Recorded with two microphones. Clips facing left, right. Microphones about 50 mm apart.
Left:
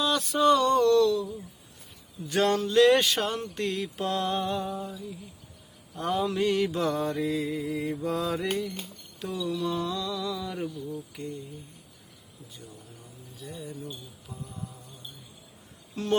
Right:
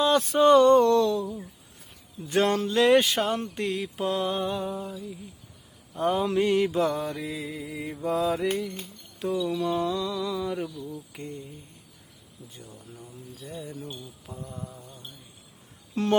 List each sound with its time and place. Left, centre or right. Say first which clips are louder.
0.0 s speech: right 4 dB; right
2.2 s mantra: right 1 dB; right
3.3 s mantra: right 3 dB; right
3.6 s music: right 1 dB; centre
6.0 s mantra: right 3 dB; centre
7.0 s music: left 4 dB; centre
9.1 s mantra: right 4 dB; centre
11.1 s speech: left 1 dB; right
13.4 s speech: right 1 dB; right
16.0 s speech: right 6 dB; right